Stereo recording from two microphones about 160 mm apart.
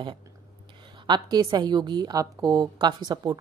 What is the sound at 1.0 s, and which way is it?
A woman's voice, 25° right (ahead or behind).